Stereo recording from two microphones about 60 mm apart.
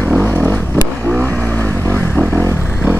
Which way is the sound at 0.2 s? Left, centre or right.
Left.